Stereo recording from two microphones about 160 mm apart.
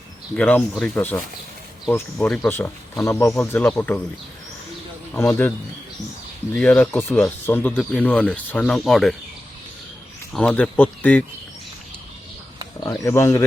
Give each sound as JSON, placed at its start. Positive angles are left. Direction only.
{"t": 0.3, "sound": "speech", "side_deg": 10}
{"t": 5.1, "sound": "speech", "side_deg": 15}
{"t": 10.3, "sound": "speech", "side_deg": 5}
{"t": 12.8, "sound": "speech", "side_deg": 15}